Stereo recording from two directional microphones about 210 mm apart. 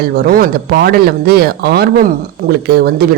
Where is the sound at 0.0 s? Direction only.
45° right (ahead or behind).